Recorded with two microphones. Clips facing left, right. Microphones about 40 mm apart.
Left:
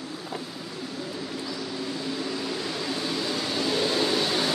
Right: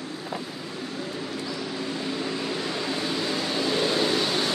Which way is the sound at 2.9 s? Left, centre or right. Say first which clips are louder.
Right 1 dB; centre.